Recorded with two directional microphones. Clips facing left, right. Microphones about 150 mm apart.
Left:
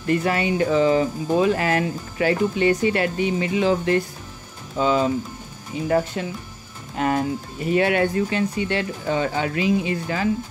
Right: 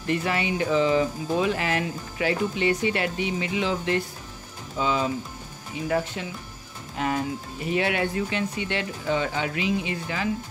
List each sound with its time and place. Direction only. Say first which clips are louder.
0.1 s speech: left 5 dB; 45° left (ahead or behind)